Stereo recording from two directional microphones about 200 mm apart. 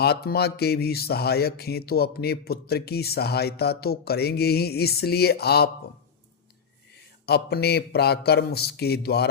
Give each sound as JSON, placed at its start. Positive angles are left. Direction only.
{"t": 0.0, "sound": "mantra", "side_deg": 50}
{"t": 7.3, "sound": "mantra", "side_deg": 55}